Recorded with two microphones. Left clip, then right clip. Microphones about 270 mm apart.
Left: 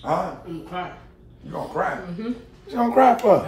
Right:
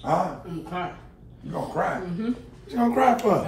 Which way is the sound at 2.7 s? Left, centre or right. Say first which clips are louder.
Left 4 dB; left.